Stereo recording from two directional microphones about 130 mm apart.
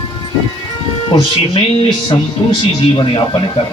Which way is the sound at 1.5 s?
50° left (ahead or behind).